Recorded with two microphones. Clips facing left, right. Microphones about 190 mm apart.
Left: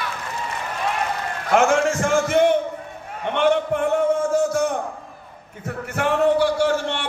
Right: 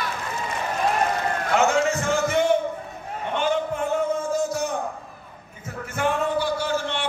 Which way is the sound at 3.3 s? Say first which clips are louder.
Left 5 dB; 70° left (ahead or behind).